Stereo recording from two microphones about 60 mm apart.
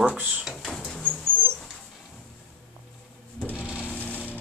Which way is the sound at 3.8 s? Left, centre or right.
Left.